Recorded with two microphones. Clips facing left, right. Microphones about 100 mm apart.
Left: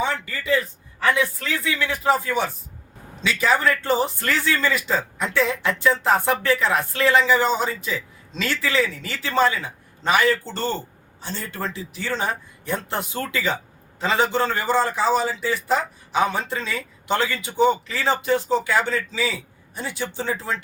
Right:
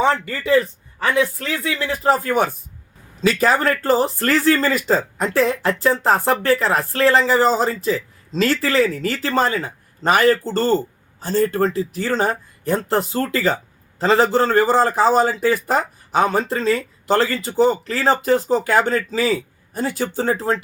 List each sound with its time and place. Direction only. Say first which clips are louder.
0.3 s a man's voice: right 6 dB; 35° right (ahead or behind)